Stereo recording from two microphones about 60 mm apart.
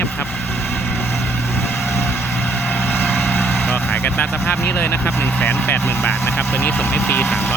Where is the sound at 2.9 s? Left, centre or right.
Left.